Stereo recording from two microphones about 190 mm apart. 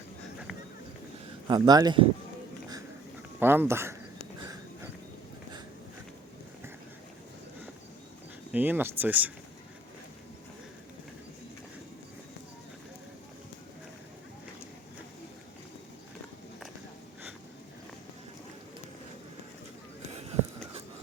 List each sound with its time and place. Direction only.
1.5 s speech: 20° right (ahead or behind)
3.4 s speech: 10° right (ahead or behind)
8.5 s speech: 10° right (ahead or behind)